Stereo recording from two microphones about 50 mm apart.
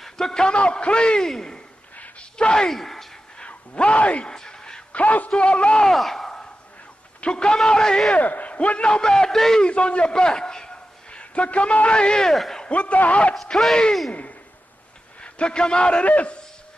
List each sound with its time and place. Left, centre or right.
0.0 s a man's voice: centre
2.7 s a man's voice: centre
3.3 s speech: left
4.3 s a sound: centre
4.9 s a man's voice: left
5.9 s speech: centre
7.2 s a man's voice: centre
8.1 s a man's voice: left; by 9.7 s centre
9.7 s a man's voice: left; by 12.6 s centre
12.6 s a man's voice: left
13.3 s speech: centre
15.3 s a man's voice: centre
16.1 s a man's voice: left